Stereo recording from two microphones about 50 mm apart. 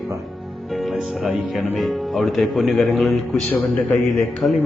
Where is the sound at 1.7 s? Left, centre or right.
Centre.